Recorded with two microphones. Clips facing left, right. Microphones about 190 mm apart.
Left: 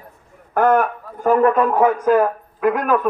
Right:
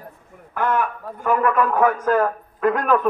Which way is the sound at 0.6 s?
45° left (ahead or behind).